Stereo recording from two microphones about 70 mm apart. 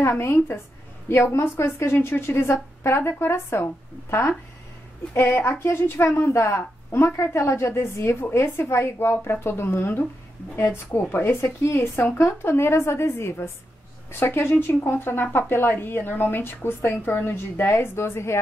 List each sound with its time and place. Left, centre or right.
0.2 s a woman's voice: left